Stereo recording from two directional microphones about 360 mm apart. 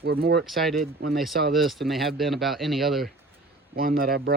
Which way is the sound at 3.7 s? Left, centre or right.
Right.